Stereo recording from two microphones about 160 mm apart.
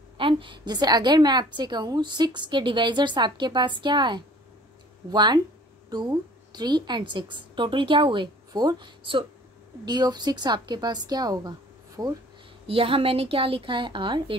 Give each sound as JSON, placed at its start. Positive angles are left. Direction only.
{"t": 0.2, "sound": "a woman's voice", "side_deg": -30}
{"t": 12.6, "sound": "a woman's voice", "side_deg": -35}